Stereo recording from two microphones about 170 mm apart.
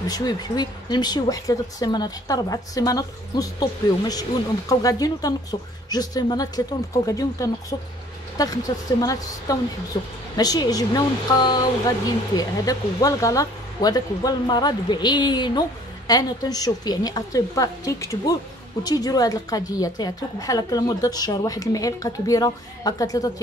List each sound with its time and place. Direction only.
0.1 s a woman's voice: 25° left (ahead or behind)
8.7 s a woman's voice: 25° left (ahead or behind)